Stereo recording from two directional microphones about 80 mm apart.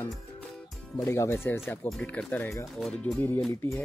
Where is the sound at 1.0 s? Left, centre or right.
Left.